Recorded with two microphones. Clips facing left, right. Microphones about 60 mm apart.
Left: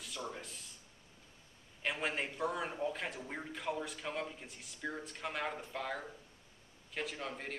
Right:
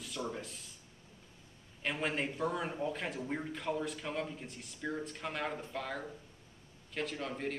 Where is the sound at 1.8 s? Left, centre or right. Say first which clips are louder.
Right 2 dB; centre.